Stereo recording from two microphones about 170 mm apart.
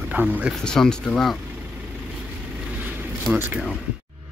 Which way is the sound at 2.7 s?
10° right (ahead or behind).